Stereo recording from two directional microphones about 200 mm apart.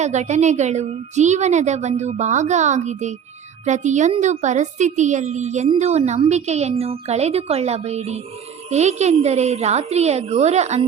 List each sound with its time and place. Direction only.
0.0 s a woman's voice: 35° right (ahead or behind)